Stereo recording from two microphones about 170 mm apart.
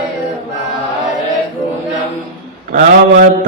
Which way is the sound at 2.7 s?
50° right (ahead or behind).